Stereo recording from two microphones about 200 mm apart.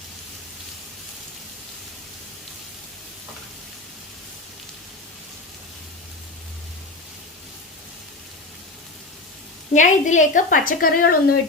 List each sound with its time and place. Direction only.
9.7 s a woman's voice: 40° left (ahead or behind)